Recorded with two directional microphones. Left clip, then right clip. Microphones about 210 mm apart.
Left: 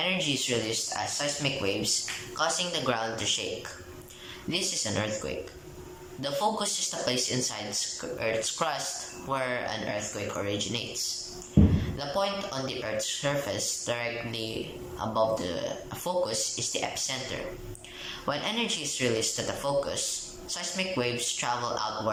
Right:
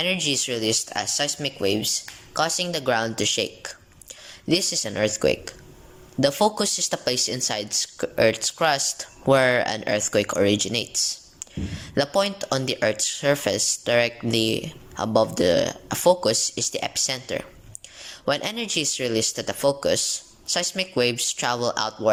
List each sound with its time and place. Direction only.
0.0 s speech: 50° right (ahead or behind)